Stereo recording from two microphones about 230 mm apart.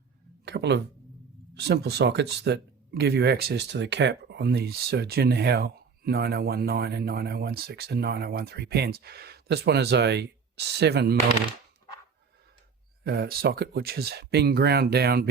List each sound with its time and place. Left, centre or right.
0.4 s speech: right
13.1 s speech: right